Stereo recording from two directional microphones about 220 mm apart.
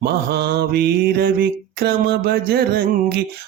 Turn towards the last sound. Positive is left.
turn(degrees=-45)  # may be behind; listen again after turning